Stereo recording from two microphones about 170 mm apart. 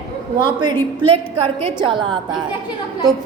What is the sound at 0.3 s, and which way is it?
Speech, 25° right (ahead or behind).